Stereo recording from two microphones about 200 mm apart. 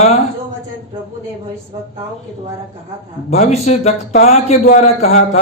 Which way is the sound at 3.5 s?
35° left (ahead or behind).